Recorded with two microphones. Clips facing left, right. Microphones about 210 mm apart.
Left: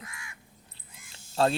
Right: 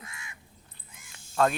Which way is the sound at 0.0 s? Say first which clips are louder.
Left 1 dB; 25° right (ahead or behind).